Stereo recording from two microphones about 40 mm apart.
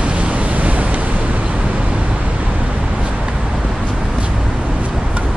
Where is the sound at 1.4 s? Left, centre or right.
Right.